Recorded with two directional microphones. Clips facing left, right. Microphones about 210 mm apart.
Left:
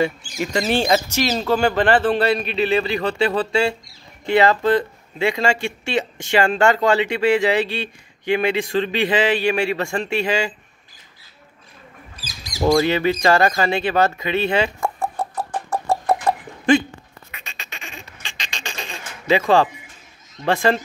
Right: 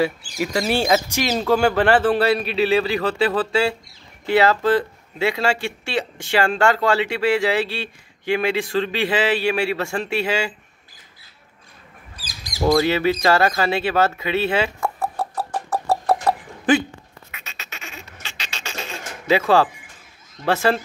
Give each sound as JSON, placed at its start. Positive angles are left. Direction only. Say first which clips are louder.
{"t": 0.0, "sound": "speech", "louder": "even", "side_deg": -5}
{"t": 12.6, "sound": "a sound", "louder": "left 1 dB", "side_deg": -5}
{"t": 19.2, "sound": "speech", "louder": "left 1 dB", "side_deg": -5}